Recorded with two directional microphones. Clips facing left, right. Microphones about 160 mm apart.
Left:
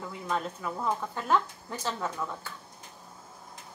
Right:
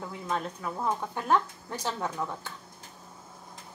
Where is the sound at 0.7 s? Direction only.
15° right (ahead or behind).